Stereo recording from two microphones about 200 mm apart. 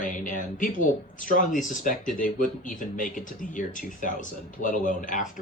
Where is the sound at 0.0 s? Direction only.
40° left (ahead or behind).